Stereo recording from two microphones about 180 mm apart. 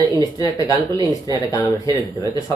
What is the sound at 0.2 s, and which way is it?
Speech, 20° left (ahead or behind).